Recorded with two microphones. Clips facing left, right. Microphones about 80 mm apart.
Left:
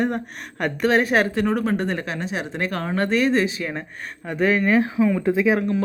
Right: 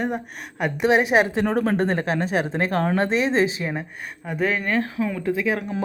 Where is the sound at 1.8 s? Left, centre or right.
Right.